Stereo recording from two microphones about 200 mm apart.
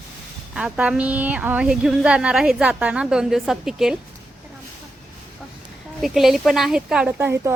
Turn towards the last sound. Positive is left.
turn(degrees=-10)  # may be behind; listen again after turning